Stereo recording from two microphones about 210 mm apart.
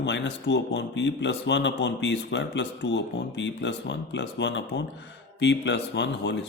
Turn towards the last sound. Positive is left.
turn(degrees=55)  # may be behind; listen again after turning